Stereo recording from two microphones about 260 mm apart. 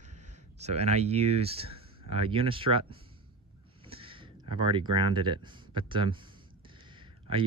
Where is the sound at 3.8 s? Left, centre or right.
Right.